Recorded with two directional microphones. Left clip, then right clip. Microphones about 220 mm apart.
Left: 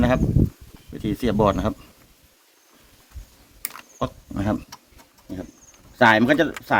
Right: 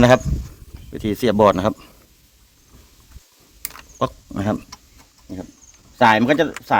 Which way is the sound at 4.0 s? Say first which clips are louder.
Right 5 dB; 35° right (ahead or behind).